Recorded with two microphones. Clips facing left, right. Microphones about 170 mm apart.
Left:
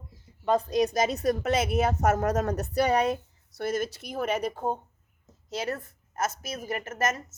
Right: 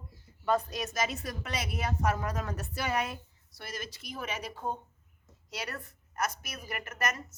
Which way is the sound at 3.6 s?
50° left (ahead or behind).